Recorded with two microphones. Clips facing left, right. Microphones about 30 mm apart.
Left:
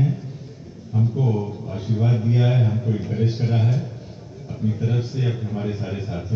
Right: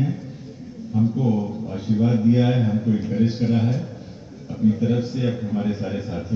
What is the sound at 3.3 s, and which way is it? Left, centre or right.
Speech, left.